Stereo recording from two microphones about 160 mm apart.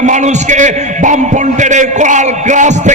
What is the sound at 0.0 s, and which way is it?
A man's voice, 50° right (ahead or behind).